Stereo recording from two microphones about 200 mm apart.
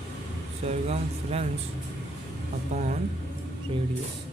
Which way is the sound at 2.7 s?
35° right (ahead or behind).